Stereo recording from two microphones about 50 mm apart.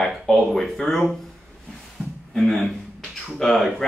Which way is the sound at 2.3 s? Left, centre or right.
Centre.